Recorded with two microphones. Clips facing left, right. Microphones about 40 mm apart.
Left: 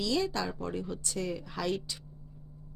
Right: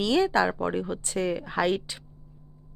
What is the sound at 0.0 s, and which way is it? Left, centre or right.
Speech, right.